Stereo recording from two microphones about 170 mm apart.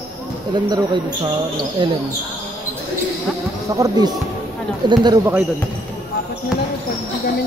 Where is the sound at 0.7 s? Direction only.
25° right (ahead or behind).